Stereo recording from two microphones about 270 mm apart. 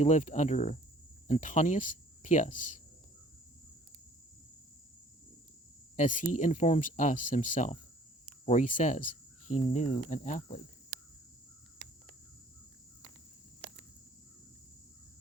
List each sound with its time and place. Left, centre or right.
0.0 s speech: left
6.0 s speech: left